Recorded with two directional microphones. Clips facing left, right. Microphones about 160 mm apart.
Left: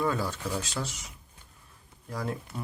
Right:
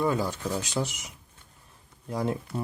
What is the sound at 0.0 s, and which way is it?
Speech, 15° right (ahead or behind).